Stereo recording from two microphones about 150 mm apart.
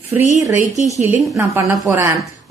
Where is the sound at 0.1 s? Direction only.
10° right (ahead or behind).